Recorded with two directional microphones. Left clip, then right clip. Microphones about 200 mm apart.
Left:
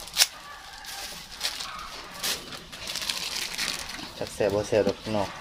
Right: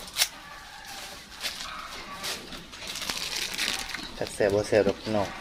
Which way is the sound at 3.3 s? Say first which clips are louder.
Right 1 dB; 5° left (ahead or behind).